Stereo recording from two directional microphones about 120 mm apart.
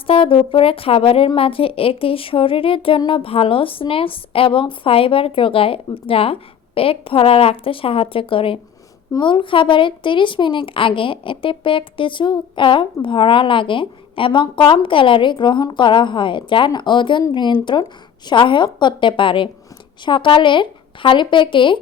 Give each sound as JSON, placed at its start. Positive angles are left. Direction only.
{"t": 0.1, "sound": "a woman's voice", "side_deg": 50}